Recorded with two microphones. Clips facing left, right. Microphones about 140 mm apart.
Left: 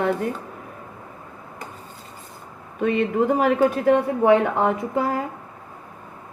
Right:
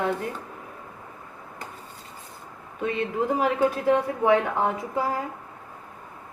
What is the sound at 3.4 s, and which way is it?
A woman's voice, 65° left (ahead or behind).